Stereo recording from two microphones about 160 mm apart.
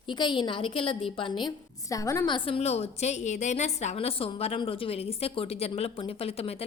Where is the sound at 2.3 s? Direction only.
35° left (ahead or behind).